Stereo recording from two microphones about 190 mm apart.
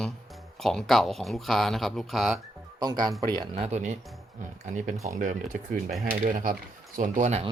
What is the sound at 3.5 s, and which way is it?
Speech, 35° right (ahead or behind).